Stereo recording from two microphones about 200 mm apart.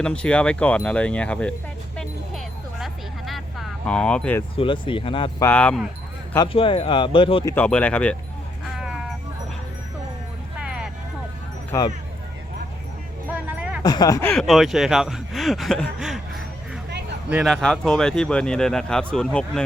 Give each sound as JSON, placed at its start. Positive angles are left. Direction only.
{"t": 0.0, "sound": "speech", "side_deg": 5}
{"t": 2.8, "sound": "a sound", "side_deg": 0}
{"t": 4.5, "sound": "speech", "side_deg": 25}
{"t": 5.4, "sound": "speech", "side_deg": 5}
{"t": 6.3, "sound": "speech", "side_deg": 25}
{"t": 7.5, "sound": "speech", "side_deg": 5}
{"t": 8.7, "sound": "a sound", "side_deg": -5}
{"t": 10.6, "sound": "vehicle", "side_deg": -5}
{"t": 11.7, "sound": "speech", "side_deg": 15}
{"t": 13.3, "sound": "a sound", "side_deg": -10}
{"t": 13.8, "sound": "speech", "side_deg": 20}
{"t": 14.3, "sound": "speech", "side_deg": 0}
{"t": 17.2, "sound": "speech", "side_deg": -5}